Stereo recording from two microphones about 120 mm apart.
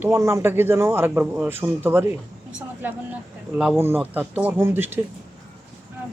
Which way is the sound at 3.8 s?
20° right (ahead or behind).